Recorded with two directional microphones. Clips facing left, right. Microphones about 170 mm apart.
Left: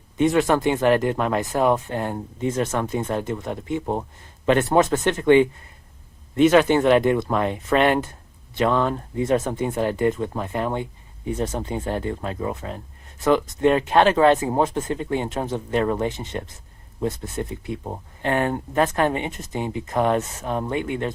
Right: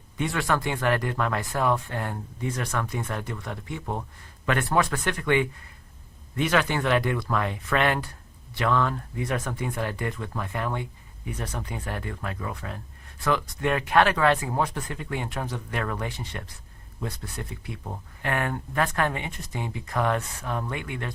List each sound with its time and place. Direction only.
0.2 s speech: 20° left (ahead or behind)